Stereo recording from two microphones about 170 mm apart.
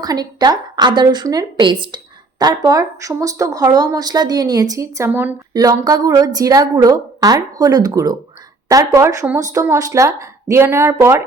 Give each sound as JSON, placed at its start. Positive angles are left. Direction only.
{"t": 0.0, "sound": "a woman's voice", "side_deg": -25}